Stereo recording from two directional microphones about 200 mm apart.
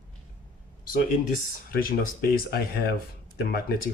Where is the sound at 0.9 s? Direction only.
45° left (ahead or behind).